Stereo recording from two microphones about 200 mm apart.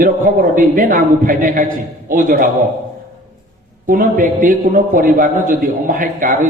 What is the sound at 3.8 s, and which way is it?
A man's voice, 45° right (ahead or behind).